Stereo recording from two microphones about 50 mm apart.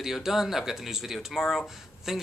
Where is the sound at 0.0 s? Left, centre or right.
Centre.